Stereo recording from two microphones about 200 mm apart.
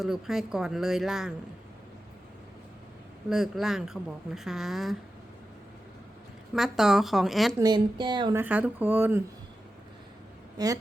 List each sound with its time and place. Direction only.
0.0 s a woman's voice: centre (ahead or behind)
3.2 s a woman's voice: centre (ahead or behind)
6.5 s a woman's voice: centre (ahead or behind)
7.6 s speech: 20° right (ahead or behind)
8.4 s speech: 10° right (ahead or behind)
10.6 s speech: 20° right (ahead or behind)